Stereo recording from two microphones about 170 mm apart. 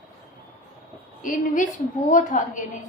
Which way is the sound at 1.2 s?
50° left (ahead or behind).